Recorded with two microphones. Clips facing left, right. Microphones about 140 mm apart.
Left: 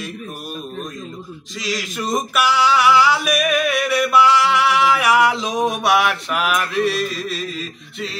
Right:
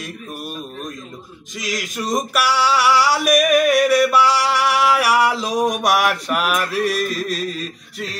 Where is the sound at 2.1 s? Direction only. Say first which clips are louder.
Left 1 dB; 35° right (ahead or behind).